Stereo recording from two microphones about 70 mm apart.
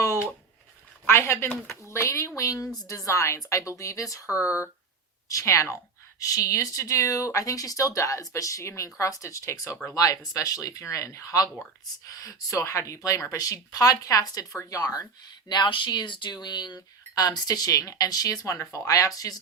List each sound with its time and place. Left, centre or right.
1.0 s a woman's voice: left
13.3 s speech: left